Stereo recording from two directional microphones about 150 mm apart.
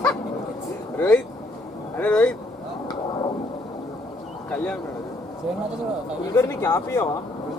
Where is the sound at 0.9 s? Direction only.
10° left (ahead or behind).